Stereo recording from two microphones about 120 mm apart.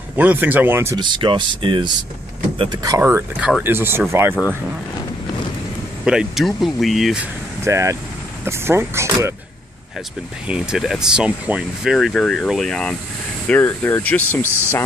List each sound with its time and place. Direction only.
0.1 s speech: 15° right (ahead or behind)
0.9 s speech: 40° right (ahead or behind)
3.0 s speech: 20° right (ahead or behind)
3.3 s speech: 5° right (ahead or behind)
3.6 s speech: 20° right (ahead or behind)
6.0 s speech: 5° right (ahead or behind)
7.6 s speech: 25° right (ahead or behind)
10.5 s speech: 5° right (ahead or behind)
13.5 s speech: 15° left (ahead or behind)